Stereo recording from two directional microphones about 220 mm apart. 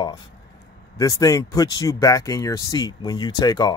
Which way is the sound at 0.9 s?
15° left (ahead or behind).